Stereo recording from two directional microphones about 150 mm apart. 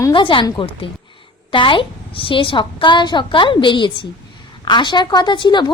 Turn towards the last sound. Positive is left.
turn(degrees=30)  # may be behind; listen again after turning